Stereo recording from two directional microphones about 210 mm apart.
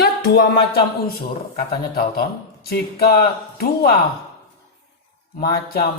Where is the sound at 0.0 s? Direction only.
45° left (ahead or behind).